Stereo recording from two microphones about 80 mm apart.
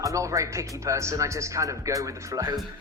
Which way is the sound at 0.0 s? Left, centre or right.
Right.